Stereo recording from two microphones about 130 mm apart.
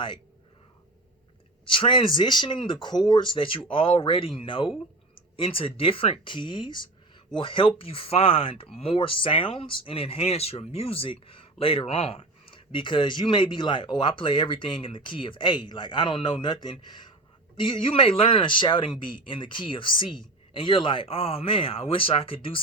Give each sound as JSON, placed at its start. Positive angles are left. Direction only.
{"t": 1.6, "sound": "speech", "side_deg": 40}